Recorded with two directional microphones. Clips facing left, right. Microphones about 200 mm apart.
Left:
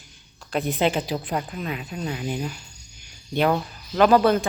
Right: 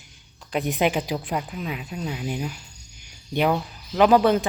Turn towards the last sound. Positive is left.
turn(degrees=-15)  # may be behind; listen again after turning